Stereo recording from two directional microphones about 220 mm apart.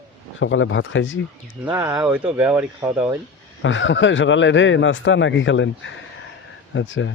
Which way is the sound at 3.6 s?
60° left (ahead or behind).